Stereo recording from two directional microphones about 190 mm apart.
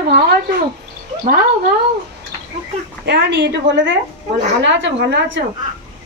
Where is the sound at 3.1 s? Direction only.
65° right (ahead or behind).